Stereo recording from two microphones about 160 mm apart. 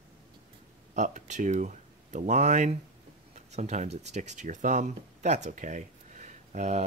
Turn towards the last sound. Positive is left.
turn(degrees=-45)  # may be behind; listen again after turning